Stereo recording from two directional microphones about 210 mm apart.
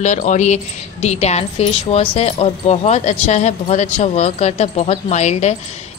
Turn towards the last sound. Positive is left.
turn(degrees=30)  # may be behind; listen again after turning